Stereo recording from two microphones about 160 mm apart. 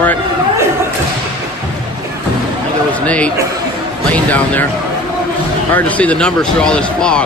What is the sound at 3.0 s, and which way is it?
A man's voice, 10° left (ahead or behind).